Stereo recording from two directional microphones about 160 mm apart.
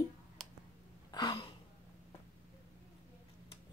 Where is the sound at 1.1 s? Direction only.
25° left (ahead or behind).